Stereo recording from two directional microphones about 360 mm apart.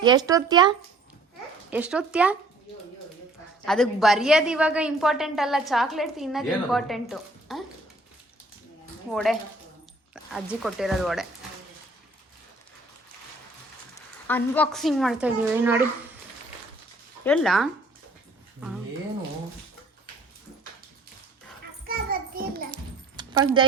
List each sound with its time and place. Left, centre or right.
0.0 s speech: centre
1.7 s a woman's voice: centre
3.7 s a woman's voice: centre
9.1 s a woman's voice: centre
14.3 s a woman's voice: centre
17.2 s a woman's voice: centre
21.8 s a sound: right
23.1 s keys jangling: centre